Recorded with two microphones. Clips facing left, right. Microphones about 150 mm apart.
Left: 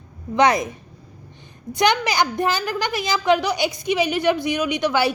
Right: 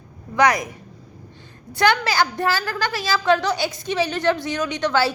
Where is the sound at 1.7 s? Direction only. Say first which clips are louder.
Even; 15° left (ahead or behind).